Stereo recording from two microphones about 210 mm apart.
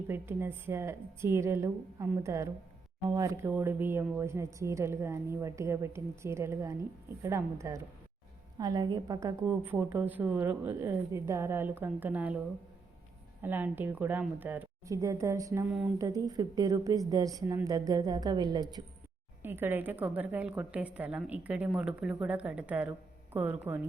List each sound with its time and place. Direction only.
0.1 s a woman's voice: 10° right (ahead or behind)
13.4 s a woman's voice: 10° right (ahead or behind)
15.6 s speech: 5° right (ahead or behind)
16.0 s a woman's voice: 15° right (ahead or behind)